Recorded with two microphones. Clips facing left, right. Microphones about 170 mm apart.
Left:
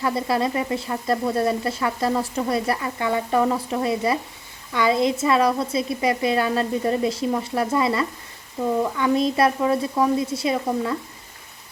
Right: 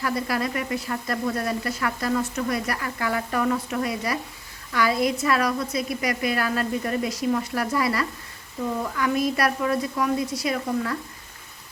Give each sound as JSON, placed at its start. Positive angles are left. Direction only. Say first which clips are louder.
{"t": 0.0, "sound": "speech", "louder": "left 4 dB", "side_deg": 25}